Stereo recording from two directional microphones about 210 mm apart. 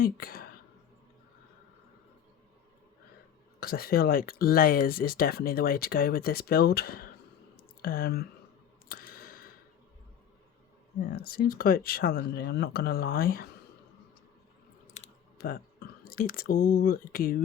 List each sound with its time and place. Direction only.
0.0 s speech: 45° left (ahead or behind)
3.6 s speech: 45° left (ahead or behind)
8.9 s a sound: 45° left (ahead or behind)
11.2 s speech: 45° left (ahead or behind)
15.0 s a sound: 30° left (ahead or behind)
15.4 s speech: 45° left (ahead or behind)